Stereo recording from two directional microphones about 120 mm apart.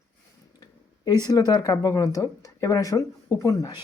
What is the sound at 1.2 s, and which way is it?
Speech, 35° left (ahead or behind).